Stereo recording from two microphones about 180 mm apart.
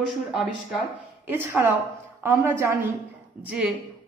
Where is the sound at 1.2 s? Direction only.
10° right (ahead or behind).